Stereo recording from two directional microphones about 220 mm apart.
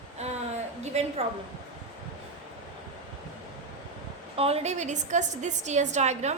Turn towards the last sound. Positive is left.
turn(degrees=-30)  # may be behind; listen again after turning